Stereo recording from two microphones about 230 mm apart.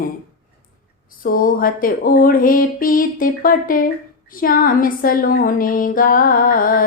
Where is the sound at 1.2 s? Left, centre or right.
Left.